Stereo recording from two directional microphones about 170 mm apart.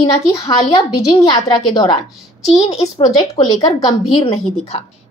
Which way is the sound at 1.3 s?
25° left (ahead or behind).